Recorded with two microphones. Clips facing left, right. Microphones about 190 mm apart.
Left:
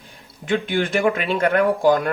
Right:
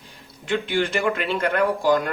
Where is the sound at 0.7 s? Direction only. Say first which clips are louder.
Left 3 dB; 50° left (ahead or behind).